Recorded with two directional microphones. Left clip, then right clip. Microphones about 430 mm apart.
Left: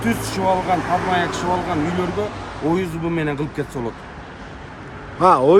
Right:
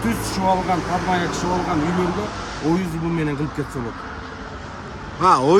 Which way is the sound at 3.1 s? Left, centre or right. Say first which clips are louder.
Left 1 dB; centre.